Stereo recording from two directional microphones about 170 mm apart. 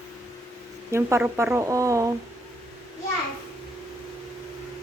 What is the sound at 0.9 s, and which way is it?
Speech, 15° right (ahead or behind).